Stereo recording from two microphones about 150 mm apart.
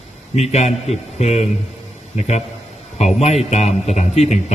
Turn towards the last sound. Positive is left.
turn(degrees=50)  # may be behind; listen again after turning